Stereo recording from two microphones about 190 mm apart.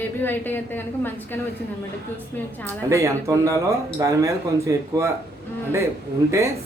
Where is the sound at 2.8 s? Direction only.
15° right (ahead or behind).